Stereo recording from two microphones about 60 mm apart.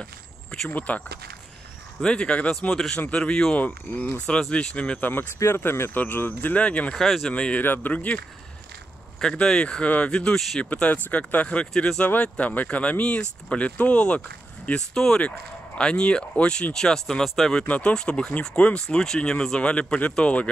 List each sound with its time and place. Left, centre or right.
0.7 s speech: left
2.0 s speech: centre
3.5 s speech: left
5.4 s speech: left
6.9 s speech: centre
7.3 s speech: centre
7.6 s speech: left
7.9 s speech: left
9.2 s speech: centre
12.2 s speech: left
14.8 s speech: centre
17.6 s speech: centre